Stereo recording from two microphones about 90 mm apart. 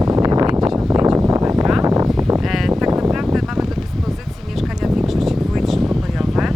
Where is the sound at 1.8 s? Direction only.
40° right (ahead or behind).